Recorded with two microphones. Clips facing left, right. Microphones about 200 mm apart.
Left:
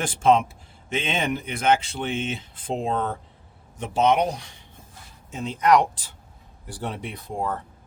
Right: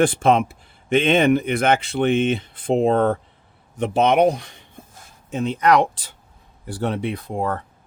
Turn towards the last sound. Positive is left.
turn(degrees=-65)  # may be behind; listen again after turning